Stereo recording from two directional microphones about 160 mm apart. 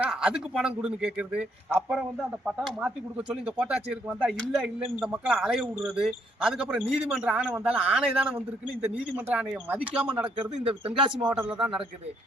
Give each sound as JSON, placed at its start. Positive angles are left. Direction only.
{"t": 0.0, "sound": "a man's voice", "side_deg": -5}
{"t": 10.4, "sound": "a man's voice", "side_deg": -35}